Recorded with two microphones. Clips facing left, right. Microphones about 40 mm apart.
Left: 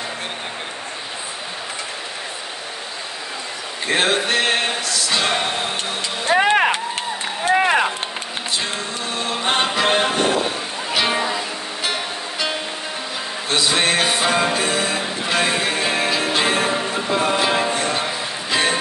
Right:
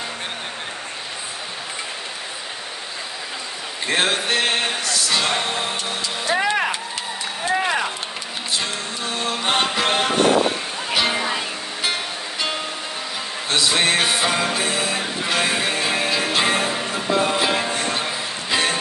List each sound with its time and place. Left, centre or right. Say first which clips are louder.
3.8 s music: left 2 dB; centre
6.2 s vehicle: left 5 dB; left
7.4 s a sound: left 5 dB; left
9.1 s music: left 1 dB; centre
9.8 s music: left 2 dB; centre
13.7 s music: even; centre